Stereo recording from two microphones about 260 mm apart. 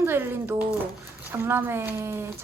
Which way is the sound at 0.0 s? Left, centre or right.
Centre.